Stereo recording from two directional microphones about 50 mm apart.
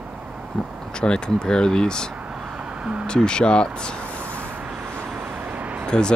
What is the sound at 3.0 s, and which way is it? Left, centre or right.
Speech, centre.